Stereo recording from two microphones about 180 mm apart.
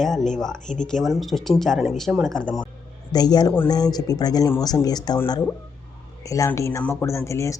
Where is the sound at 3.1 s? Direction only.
20° left (ahead or behind).